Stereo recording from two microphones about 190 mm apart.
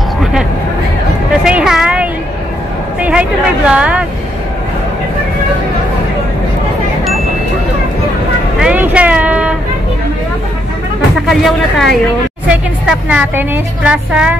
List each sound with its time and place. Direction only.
0.2 s music: centre (ahead or behind)
3.0 s speech: 5° right (ahead or behind)
8.5 s vehicle: 5° right (ahead or behind)
11.2 s a woman's voice: centre (ahead or behind)